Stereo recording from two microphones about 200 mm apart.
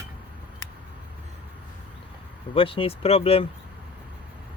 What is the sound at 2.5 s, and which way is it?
Speech, 25° left (ahead or behind).